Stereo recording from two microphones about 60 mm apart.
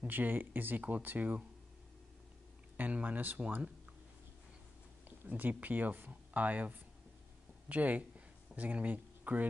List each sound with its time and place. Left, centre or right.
0.0 s speech: right
2.8 s speech: right
5.2 s speech: right